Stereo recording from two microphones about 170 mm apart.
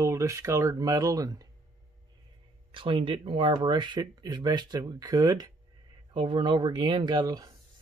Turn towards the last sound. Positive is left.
turn(degrees=-20)  # may be behind; listen again after turning